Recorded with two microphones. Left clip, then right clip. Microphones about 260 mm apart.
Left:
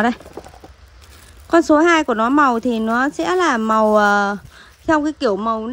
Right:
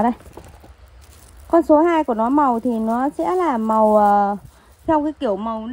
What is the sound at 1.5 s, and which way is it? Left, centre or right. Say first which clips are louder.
Speech: left 1 dB; right.